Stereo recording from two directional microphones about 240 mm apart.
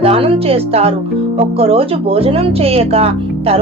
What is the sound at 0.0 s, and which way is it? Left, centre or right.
Speech, right.